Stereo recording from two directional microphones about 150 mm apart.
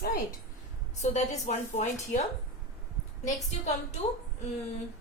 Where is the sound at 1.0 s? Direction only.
50° left (ahead or behind).